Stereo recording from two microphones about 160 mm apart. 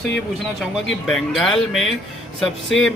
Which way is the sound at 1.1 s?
5° left (ahead or behind).